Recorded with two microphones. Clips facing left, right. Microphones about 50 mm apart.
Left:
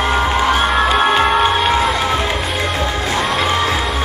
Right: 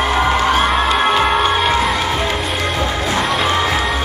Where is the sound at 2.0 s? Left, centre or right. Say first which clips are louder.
Left 1 dB; centre.